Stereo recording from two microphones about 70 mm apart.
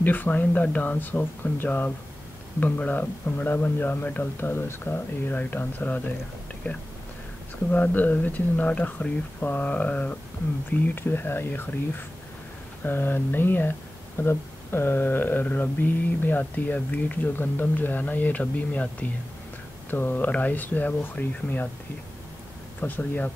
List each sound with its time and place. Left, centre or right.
0.0 s speech: left
10.7 s speech: left
22.8 s speech: left